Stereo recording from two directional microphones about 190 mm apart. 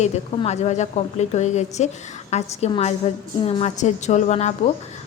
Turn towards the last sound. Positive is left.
turn(degrees=35)  # may be behind; listen again after turning